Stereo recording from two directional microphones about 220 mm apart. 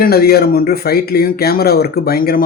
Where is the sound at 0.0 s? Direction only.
45° left (ahead or behind).